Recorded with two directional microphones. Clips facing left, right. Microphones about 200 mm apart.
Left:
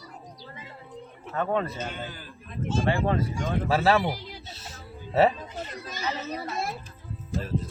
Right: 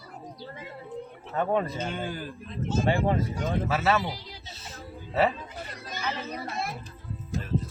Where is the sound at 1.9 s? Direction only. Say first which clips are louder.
Right 5 dB; 50° right (ahead or behind).